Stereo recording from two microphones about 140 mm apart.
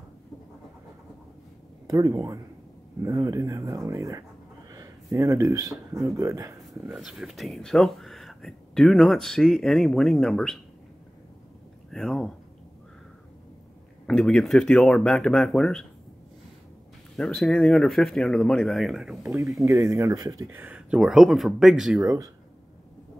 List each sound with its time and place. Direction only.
1.9 s speech: 25° right (ahead or behind)
4.6 s a sound: 25° right (ahead or behind)
6.1 s speech: 20° right (ahead or behind)
6.6 s a sound: centre (ahead or behind)
6.9 s speech: 5° right (ahead or behind)
11.9 s speech: centre (ahead or behind)
14.0 s speech: 5° left (ahead or behind)
17.2 s speech: centre (ahead or behind)
19.6 s speech: 20° right (ahead or behind); by 22.0 s 5° right (ahead or behind)
22.0 s speech: 25° right (ahead or behind)